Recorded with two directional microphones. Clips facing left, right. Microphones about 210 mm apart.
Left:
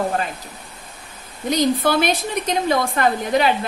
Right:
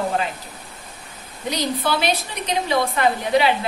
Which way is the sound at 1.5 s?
50° left (ahead or behind).